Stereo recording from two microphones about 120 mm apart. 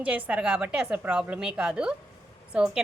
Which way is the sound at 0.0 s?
10° right (ahead or behind).